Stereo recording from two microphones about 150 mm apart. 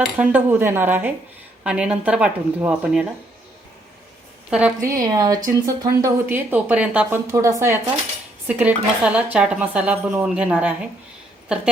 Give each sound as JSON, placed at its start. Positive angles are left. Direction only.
{"t": 0.0, "sound": "speech", "side_deg": -10}
{"t": 4.8, "sound": "a woman's voice", "side_deg": -20}